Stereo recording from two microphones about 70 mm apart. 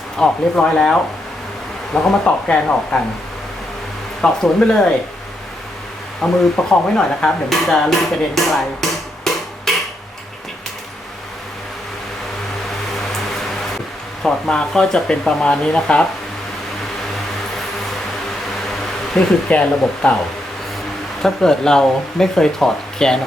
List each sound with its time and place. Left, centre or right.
0.2 s speech: centre
4.2 s speech: centre
6.2 s speech: centre
8.4 s a sound: centre
14.2 s speech: centre
19.5 s speech: centre
21.2 s speech: centre